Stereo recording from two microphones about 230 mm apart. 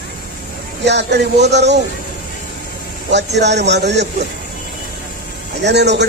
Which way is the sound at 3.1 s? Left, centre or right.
Right.